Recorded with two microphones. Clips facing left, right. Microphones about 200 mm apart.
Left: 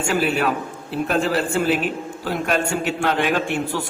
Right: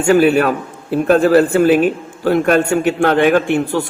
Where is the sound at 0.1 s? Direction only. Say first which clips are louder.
Right 10 dB; 55° right (ahead or behind).